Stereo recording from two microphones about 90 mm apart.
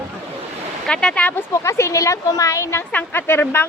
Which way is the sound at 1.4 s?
30° left (ahead or behind).